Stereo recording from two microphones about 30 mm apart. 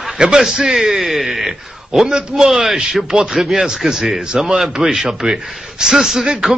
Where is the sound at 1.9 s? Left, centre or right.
Centre.